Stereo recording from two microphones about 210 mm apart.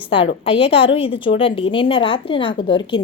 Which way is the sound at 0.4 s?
25° left (ahead or behind).